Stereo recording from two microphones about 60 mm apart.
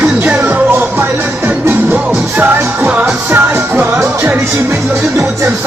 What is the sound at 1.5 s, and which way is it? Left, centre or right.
Music, right.